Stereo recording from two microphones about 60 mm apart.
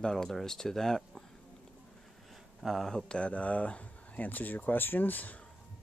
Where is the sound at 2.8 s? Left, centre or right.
Centre; by 5.3 s left.